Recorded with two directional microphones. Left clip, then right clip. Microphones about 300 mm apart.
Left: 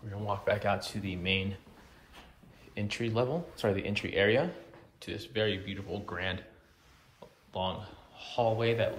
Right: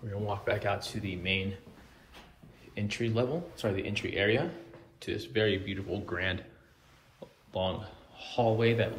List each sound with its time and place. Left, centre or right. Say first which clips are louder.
0.1 s speech: left 1 dB; centre
2.7 s speech: right 1 dB; centre
7.5 s speech: right 2 dB; centre